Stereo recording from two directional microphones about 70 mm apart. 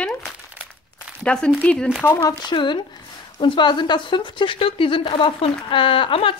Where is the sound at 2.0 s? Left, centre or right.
Left.